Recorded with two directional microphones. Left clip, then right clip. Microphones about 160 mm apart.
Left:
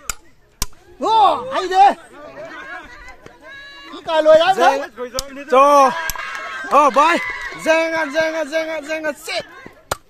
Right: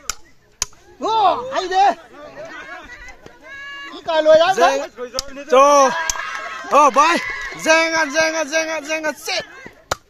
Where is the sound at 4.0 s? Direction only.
55° left (ahead or behind).